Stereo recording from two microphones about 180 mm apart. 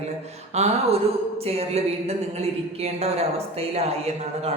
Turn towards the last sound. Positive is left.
turn(degrees=-35)  # may be behind; listen again after turning